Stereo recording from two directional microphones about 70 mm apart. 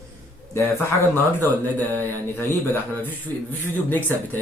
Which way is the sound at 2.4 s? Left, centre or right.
Left.